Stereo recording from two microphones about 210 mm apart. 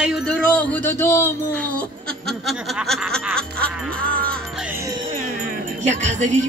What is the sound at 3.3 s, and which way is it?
Music, 5° left (ahead or behind).